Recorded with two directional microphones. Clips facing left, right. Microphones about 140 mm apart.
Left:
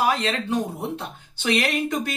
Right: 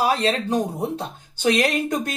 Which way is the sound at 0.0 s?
35° right (ahead or behind).